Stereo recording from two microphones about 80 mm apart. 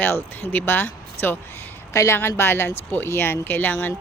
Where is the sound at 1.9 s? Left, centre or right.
Left.